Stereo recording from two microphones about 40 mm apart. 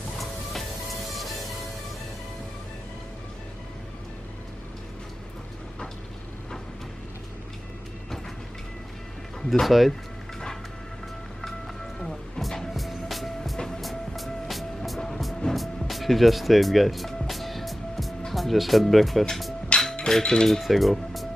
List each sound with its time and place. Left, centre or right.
0.2 s music: centre
9.5 s speech: centre
12.0 s music: centre
18.3 s speech: centre
19.7 s music: left
20.1 s speech: centre
20.6 s speech: centre